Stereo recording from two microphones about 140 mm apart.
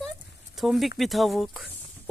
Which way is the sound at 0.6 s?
Centre (ahead or behind).